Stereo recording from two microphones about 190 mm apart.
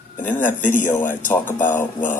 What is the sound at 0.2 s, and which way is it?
Speech, 10° left (ahead or behind).